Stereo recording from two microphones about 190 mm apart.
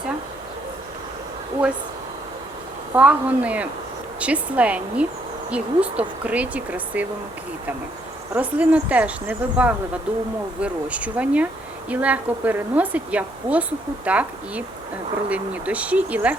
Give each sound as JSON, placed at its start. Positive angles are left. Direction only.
{"t": 2.9, "sound": "speech", "side_deg": -5}
{"t": 8.3, "sound": "speech", "side_deg": -10}